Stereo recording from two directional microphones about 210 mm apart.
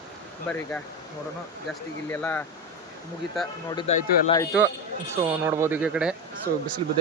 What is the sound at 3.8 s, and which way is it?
Speech, 30° left (ahead or behind).